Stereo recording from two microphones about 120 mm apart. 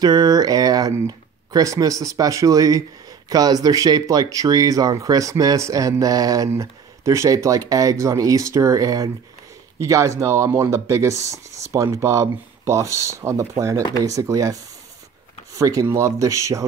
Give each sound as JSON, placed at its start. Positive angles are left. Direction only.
{"t": 0.0, "sound": "speech", "side_deg": -35}